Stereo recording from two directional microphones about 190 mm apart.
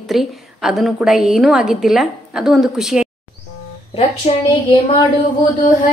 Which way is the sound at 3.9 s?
35° left (ahead or behind).